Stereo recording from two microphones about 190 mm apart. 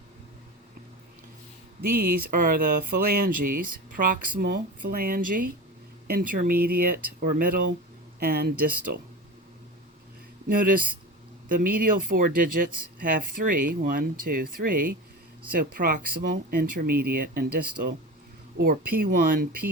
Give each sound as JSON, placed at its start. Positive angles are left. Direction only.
{"t": 1.9, "sound": "speech", "side_deg": -50}
{"t": 10.5, "sound": "speech", "side_deg": -45}